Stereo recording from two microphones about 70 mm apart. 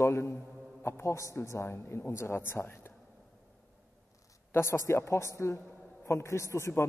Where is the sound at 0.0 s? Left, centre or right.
Left.